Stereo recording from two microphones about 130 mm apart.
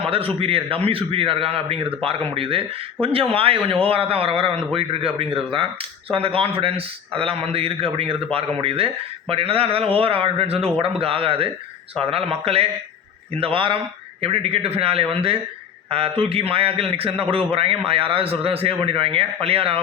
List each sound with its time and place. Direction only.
0.0 s a man's voice: 45° right (ahead or behind)